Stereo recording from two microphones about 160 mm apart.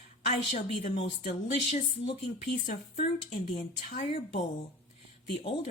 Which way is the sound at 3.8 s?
50° left (ahead or behind).